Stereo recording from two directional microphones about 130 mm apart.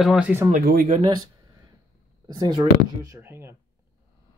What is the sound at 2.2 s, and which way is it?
Speech, 35° right (ahead or behind).